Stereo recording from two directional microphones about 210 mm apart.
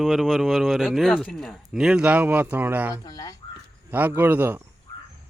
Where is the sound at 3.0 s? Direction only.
20° left (ahead or behind).